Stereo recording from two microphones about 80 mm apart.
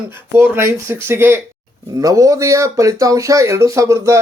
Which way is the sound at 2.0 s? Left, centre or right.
Right.